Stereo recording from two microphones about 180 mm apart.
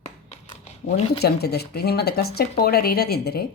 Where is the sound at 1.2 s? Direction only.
60° left (ahead or behind).